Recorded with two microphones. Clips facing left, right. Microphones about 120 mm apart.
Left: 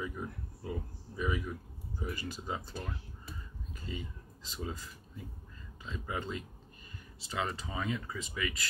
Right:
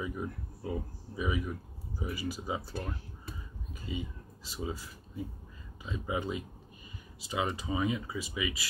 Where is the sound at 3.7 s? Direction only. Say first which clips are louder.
Right 4 dB; 10° right (ahead or behind).